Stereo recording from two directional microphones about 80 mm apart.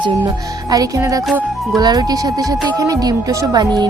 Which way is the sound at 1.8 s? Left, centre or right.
Right.